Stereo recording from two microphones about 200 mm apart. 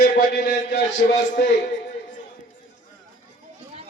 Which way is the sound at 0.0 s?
50° left (ahead or behind).